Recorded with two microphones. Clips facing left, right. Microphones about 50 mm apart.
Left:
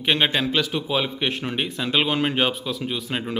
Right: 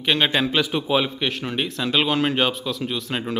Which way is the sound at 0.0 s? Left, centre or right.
Centre.